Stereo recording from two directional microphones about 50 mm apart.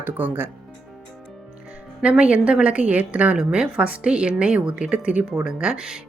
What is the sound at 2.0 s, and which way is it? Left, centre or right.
A woman's voice, right.